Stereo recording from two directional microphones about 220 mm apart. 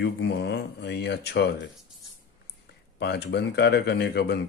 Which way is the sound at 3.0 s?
50° left (ahead or behind).